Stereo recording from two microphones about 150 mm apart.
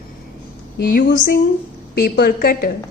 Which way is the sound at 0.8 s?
80° left.